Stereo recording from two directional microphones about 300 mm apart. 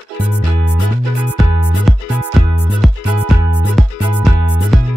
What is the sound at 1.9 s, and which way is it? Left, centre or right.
Music, centre.